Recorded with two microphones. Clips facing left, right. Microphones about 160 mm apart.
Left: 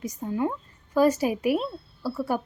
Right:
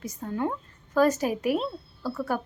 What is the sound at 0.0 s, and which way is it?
Speech, 10° left (ahead or behind).